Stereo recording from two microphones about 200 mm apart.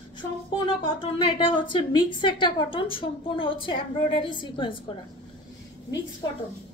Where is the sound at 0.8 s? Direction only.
25° left (ahead or behind).